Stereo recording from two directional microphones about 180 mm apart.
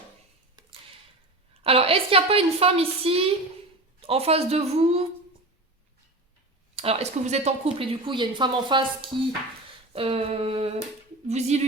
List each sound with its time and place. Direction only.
1.6 s speech: 30° right (ahead or behind)
6.7 s speech: 35° right (ahead or behind)